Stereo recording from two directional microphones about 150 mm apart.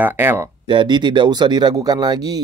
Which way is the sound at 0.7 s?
30° right (ahead or behind).